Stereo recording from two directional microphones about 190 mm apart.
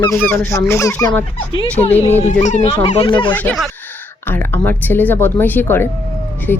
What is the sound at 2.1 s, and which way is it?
Speech, 35° left (ahead or behind).